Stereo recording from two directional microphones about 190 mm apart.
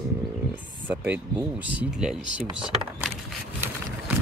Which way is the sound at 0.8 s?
10° right (ahead or behind).